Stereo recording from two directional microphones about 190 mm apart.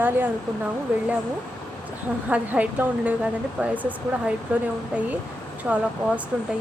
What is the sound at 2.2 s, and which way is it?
A woman's voice, 5° right (ahead or behind).